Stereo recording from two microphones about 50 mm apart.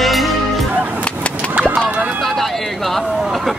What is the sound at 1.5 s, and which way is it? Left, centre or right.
Fowl, right.